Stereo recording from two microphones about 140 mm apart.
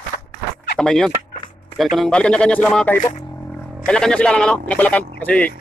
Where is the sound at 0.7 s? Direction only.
5° left (ahead or behind).